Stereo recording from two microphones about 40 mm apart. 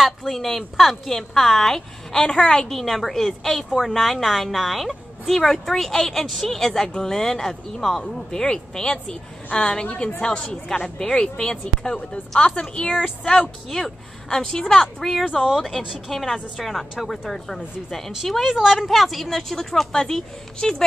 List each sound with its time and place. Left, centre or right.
0.3 s a woman's voice: centre; by 13.3 s left
13.4 s a woman's voice: centre
15.3 s speech: centre
16.1 s a woman's voice: centre
18.2 s speech: centre
18.9 s a woman's voice: centre